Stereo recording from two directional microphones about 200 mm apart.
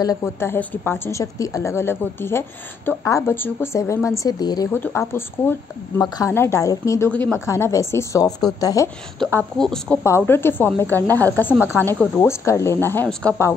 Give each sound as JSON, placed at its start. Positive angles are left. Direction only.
{"t": 0.0, "sound": "speech", "side_deg": 15}
{"t": 9.2, "sound": "speech", "side_deg": 5}